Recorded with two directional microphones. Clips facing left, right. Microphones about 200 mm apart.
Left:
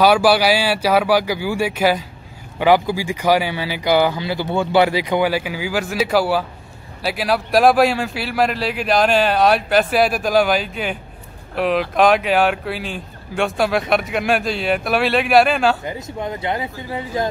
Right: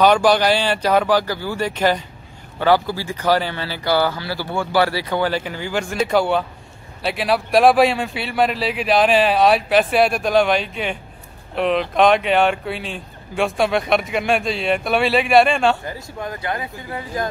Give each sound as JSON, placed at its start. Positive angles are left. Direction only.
{"t": 0.0, "sound": "speech", "side_deg": 5}
{"t": 15.8, "sound": "speech", "side_deg": 20}